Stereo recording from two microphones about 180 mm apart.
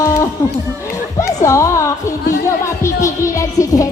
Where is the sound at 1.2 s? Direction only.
15° left (ahead or behind).